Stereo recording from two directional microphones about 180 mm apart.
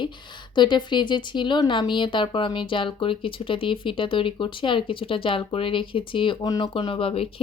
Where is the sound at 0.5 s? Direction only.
25° left (ahead or behind).